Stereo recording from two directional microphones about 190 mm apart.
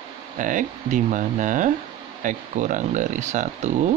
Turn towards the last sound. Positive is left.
turn(degrees=-40)  # may be behind; listen again after turning